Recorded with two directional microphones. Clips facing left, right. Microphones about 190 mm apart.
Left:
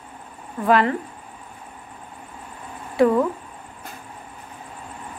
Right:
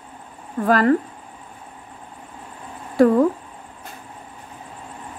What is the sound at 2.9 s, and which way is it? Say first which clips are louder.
Speech: right 2 dB; 40° right (ahead or behind).